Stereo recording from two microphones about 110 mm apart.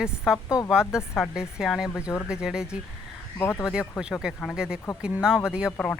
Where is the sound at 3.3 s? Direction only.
20° left (ahead or behind).